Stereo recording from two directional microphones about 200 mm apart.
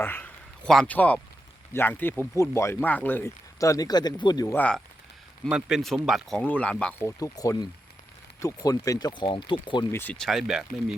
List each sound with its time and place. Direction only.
0.0 s speech: 10° left (ahead or behind)
5.5 s speech: 5° right (ahead or behind)
7.2 s speech: 20° left (ahead or behind)
9.9 s speech: 10° left (ahead or behind)